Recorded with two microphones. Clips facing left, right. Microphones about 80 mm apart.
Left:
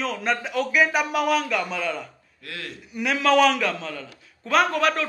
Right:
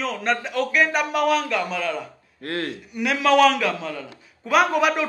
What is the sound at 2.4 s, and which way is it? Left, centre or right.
Speech, right.